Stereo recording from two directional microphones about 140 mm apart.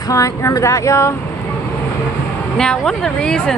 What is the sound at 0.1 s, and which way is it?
Speech, 20° left (ahead or behind).